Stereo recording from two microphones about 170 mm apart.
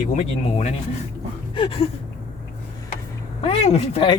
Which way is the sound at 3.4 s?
35° left (ahead or behind).